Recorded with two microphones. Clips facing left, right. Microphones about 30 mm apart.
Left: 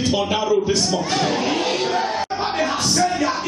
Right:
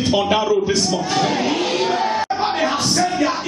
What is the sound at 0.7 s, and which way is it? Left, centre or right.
Speech, centre.